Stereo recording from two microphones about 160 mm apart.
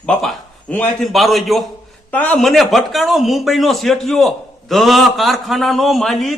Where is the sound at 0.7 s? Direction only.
5° left (ahead or behind).